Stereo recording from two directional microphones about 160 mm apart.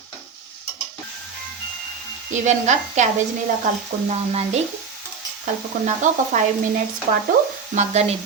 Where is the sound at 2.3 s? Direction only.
50° right (ahead or behind).